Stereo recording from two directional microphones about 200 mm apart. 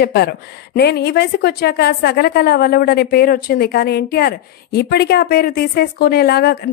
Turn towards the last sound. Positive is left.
turn(degrees=50)  # may be behind; listen again after turning